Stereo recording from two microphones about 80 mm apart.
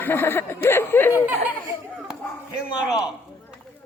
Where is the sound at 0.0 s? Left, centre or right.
Left.